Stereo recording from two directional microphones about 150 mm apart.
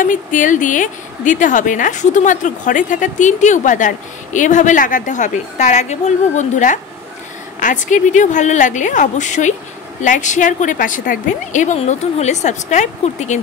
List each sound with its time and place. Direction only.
0.0 s speech: 60° left (ahead or behind)